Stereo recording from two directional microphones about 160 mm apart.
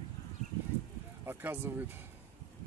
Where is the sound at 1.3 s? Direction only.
15° right (ahead or behind).